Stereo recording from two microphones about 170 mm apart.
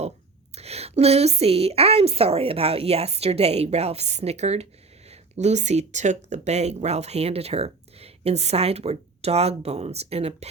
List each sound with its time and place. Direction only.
0.5 s a woman's voice: 35° right (ahead or behind)